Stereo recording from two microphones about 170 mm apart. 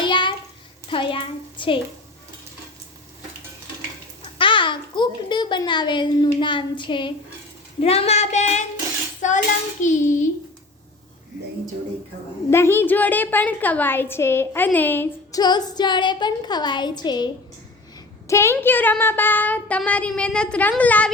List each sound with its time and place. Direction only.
0.0 s a sound: 30° left (ahead or behind)
0.9 s a child's voice: 30° left (ahead or behind)
4.4 s a child's voice: 30° left (ahead or behind)
9.2 s child singing: 45° left (ahead or behind)
9.8 s a sound: 45° left (ahead or behind)
12.5 s a woman's voice: 15° left (ahead or behind)
15.4 s a woman's voice: 25° left (ahead or behind)